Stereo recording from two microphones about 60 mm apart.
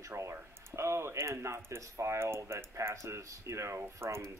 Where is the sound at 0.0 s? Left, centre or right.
Right.